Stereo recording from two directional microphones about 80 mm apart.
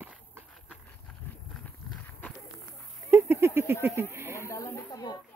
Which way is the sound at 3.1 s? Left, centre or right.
Right.